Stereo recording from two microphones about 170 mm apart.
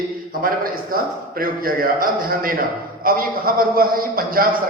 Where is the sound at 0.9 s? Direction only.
60° right (ahead or behind).